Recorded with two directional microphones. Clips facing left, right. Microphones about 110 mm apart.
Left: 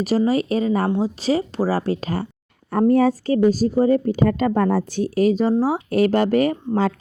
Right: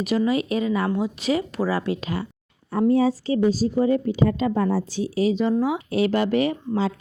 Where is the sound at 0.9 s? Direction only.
30° left (ahead or behind).